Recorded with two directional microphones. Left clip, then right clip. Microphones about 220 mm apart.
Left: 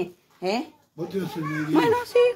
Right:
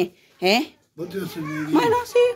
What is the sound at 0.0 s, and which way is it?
Speech, 45° right (ahead or behind).